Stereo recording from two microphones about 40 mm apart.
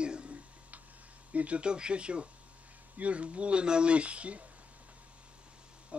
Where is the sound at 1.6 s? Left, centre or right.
Right.